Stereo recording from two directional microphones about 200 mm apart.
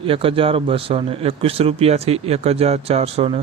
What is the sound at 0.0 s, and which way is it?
Speech, 25° right (ahead or behind).